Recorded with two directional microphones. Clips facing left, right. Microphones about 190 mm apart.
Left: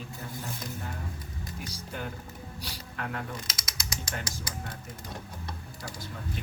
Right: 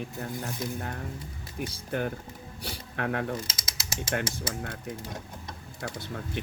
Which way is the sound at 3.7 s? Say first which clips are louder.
Right 2 dB; 30° right (ahead or behind).